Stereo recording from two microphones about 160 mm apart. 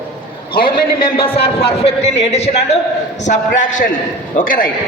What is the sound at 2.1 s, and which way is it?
Speech, 90° left.